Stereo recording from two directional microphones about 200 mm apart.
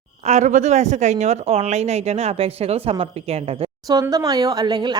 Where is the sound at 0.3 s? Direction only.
35° right (ahead or behind).